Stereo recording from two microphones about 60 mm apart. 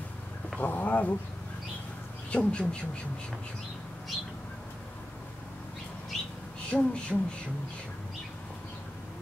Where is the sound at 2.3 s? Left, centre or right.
Centre.